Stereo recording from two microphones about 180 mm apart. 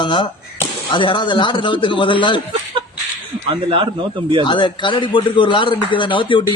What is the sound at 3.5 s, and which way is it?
Speech, 30° right (ahead or behind).